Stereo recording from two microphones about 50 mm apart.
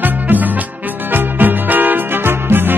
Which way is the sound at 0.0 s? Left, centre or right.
Right.